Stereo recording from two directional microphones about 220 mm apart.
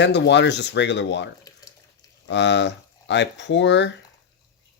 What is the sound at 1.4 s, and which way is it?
Water tap, 15° left (ahead or behind).